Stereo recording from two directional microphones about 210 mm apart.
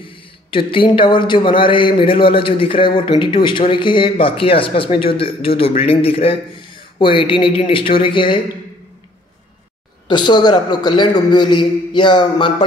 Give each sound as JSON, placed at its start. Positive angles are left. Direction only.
{"t": 0.0, "sound": "a man's voice", "side_deg": 25}
{"t": 10.0, "sound": "a man's voice", "side_deg": 20}